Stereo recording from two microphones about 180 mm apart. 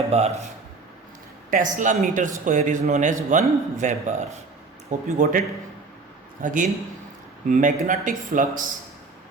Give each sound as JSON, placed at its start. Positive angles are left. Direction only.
{"t": 0.1, "sound": "speech", "side_deg": -35}
{"t": 1.5, "sound": "a man's voice", "side_deg": -45}
{"t": 6.4, "sound": "a man's voice", "side_deg": -45}